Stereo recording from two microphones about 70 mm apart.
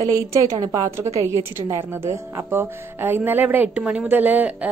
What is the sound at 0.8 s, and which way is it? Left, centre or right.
Speech, right.